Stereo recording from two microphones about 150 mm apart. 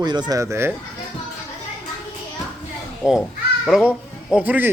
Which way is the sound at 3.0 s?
5° right (ahead or behind).